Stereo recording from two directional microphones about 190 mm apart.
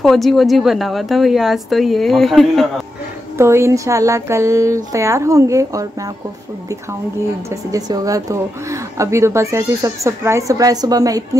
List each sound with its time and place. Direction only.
0.0 s a woman's voice: centre (ahead or behind)
3.3 s speech: 15° right (ahead or behind)
7.7 s speech: 20° right (ahead or behind)